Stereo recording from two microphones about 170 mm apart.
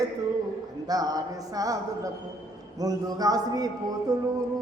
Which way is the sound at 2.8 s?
20° right (ahead or behind).